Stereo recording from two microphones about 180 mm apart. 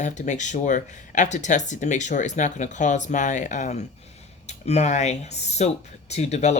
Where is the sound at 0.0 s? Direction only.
40° left (ahead or behind).